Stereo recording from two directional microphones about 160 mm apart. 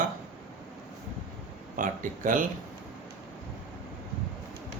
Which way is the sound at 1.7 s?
55° right (ahead or behind).